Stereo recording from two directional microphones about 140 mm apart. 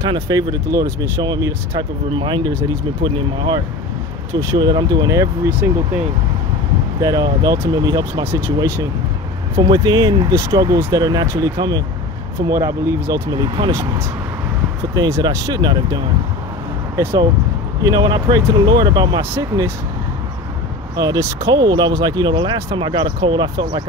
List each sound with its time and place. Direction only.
0.0 s speech: 30° right (ahead or behind)
7.0 s speech: 25° right (ahead or behind)
9.6 s speech: 30° right (ahead or behind)
13.3 s speech: 30° right (ahead or behind)
13.7 s speech: 20° right (ahead or behind)
16.9 s speech: 15° right (ahead or behind)
17.8 s speech: 30° right (ahead or behind)
20.9 s speech: 30° right (ahead or behind)